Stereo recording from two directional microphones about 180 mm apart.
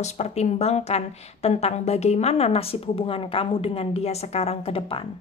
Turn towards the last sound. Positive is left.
turn(degrees=30)  # may be behind; listen again after turning